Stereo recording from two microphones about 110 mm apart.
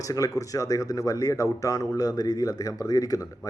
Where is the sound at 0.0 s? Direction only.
30° left (ahead or behind).